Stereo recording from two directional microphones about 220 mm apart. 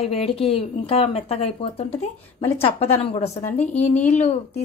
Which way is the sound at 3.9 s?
10° left (ahead or behind).